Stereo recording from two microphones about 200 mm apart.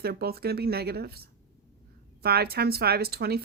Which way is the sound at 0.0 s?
50° right (ahead or behind).